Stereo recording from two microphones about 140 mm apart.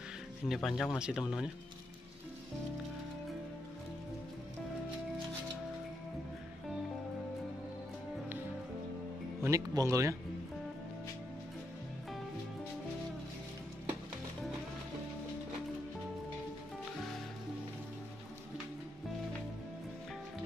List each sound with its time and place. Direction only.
0.5 s speech: centre (ahead or behind)
9.4 s speech: 20° right (ahead or behind)